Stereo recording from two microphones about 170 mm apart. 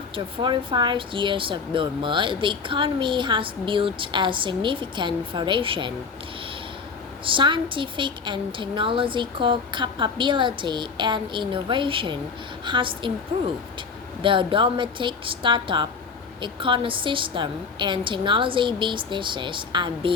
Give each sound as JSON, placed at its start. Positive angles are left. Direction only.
{"t": 0.3, "sound": "speech", "side_deg": -30}
{"t": 7.3, "sound": "speech", "side_deg": -30}
{"t": 14.2, "sound": "speech", "side_deg": -30}